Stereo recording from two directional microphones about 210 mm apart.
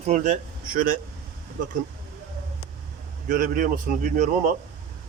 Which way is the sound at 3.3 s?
40° right (ahead or behind).